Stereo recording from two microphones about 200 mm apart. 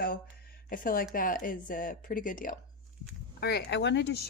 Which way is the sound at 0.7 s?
45° left (ahead or behind).